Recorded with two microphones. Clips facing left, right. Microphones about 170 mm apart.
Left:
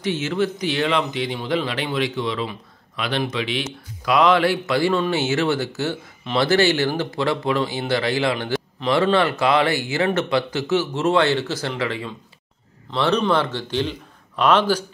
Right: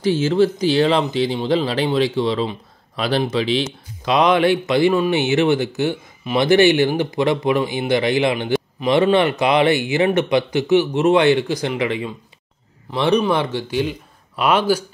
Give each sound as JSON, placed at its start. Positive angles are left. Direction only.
{"t": 0.0, "sound": "speech", "side_deg": -30}